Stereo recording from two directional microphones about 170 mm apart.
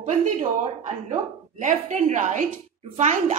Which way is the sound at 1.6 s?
45° right (ahead or behind).